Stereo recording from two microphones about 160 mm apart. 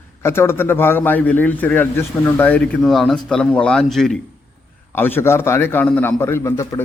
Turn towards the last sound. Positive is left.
turn(degrees=20)  # may be behind; listen again after turning